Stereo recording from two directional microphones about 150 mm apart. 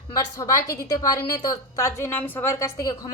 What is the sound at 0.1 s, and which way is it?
A woman's voice, 25° left (ahead or behind).